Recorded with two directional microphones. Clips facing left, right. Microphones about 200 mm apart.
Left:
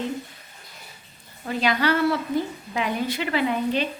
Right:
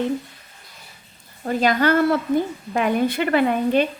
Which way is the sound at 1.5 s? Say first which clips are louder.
Right 4 dB; 45° right (ahead or behind).